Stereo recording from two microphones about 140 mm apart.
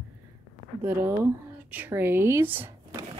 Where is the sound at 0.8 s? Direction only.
15° right (ahead or behind).